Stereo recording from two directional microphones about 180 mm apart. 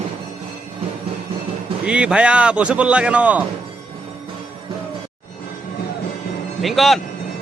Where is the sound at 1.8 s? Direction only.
5° right (ahead or behind).